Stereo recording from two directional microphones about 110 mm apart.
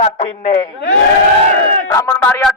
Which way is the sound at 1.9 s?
25° left (ahead or behind).